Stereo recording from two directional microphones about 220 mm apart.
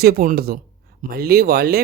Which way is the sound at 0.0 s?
40° right (ahead or behind).